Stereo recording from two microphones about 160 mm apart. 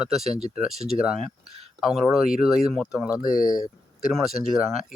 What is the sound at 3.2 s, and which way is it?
Speech, 60° left (ahead or behind).